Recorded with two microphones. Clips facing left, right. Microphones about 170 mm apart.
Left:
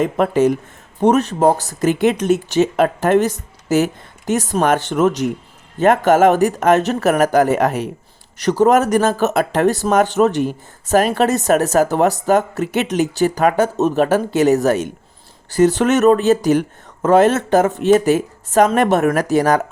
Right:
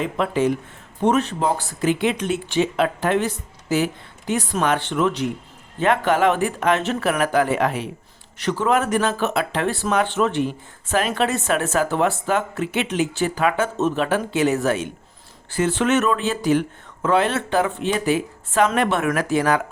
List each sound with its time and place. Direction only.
0.0 s speech: 45° left (ahead or behind)